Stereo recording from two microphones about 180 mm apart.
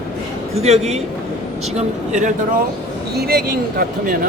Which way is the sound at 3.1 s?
60° right (ahead or behind).